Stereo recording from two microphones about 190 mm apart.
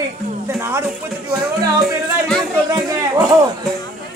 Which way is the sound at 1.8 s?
5° left (ahead or behind).